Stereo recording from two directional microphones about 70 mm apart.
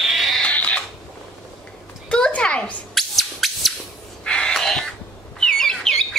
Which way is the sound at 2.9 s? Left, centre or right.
Centre.